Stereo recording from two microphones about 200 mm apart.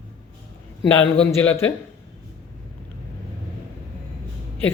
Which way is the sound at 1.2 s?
10° left (ahead or behind).